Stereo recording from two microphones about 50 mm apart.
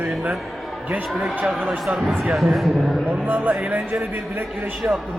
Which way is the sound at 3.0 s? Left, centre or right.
Right.